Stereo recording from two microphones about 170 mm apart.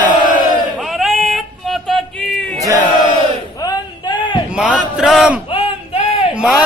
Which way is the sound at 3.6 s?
25° left (ahead or behind).